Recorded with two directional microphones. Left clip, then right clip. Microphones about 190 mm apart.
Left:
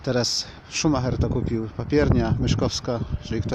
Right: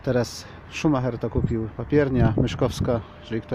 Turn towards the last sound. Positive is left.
turn(degrees=10)  # may be behind; listen again after turning